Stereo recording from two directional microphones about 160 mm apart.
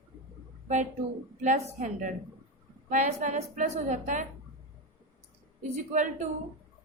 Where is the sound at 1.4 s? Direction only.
50° right (ahead or behind).